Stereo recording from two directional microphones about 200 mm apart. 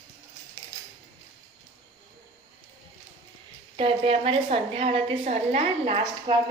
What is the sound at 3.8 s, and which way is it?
A woman's voice, 30° right (ahead or behind).